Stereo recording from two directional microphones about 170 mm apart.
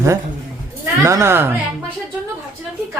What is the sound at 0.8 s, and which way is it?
Speech, 20° right (ahead or behind).